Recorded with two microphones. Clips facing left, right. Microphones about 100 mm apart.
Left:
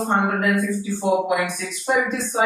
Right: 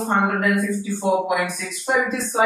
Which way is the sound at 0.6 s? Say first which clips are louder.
Even; centre (ahead or behind).